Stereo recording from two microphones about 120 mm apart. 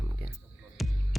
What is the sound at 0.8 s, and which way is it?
Music, centre (ahead or behind).